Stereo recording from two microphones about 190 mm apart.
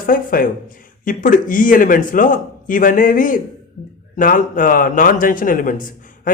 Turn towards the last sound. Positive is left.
turn(degrees=45)  # may be behind; listen again after turning